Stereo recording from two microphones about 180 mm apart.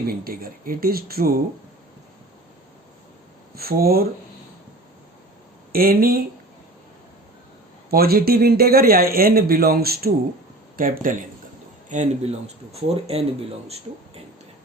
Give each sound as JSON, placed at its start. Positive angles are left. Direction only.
{"t": 0.1, "sound": "speech", "side_deg": -55}
{"t": 3.5, "sound": "speech", "side_deg": -55}
{"t": 5.7, "sound": "speech", "side_deg": -55}
{"t": 7.9, "sound": "speech", "side_deg": -60}